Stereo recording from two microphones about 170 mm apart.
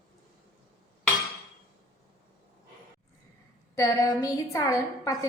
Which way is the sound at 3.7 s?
20° left (ahead or behind).